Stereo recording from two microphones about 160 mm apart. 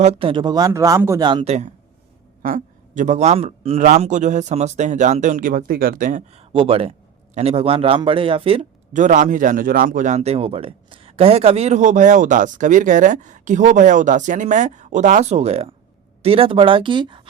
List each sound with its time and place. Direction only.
0.0 s speech: 40° right (ahead or behind); by 1.2 s 15° right (ahead or behind)
1.2 s speech: 30° right (ahead or behind)
2.4 s a man's voice: 55° right (ahead or behind)
6.5 s a man's voice: 35° right (ahead or behind)
9.0 s a man's voice: 50° right (ahead or behind); by 17.2 s 30° right (ahead or behind)